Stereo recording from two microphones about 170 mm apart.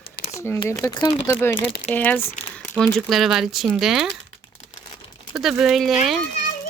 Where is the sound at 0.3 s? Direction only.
15° left (ahead or behind).